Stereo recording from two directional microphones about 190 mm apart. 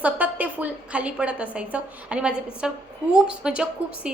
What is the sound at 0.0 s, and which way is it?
A woman's voice, 10° right (ahead or behind).